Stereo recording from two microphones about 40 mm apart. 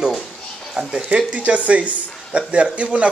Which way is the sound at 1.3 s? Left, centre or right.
Right.